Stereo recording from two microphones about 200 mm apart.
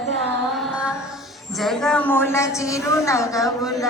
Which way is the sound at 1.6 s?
Centre (ahead or behind).